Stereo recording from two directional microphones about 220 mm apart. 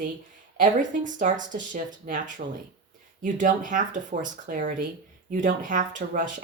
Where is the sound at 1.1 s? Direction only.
35° right (ahead or behind).